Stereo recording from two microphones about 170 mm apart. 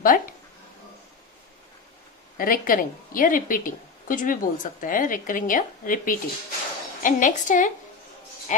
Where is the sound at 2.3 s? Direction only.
55° left (ahead or behind).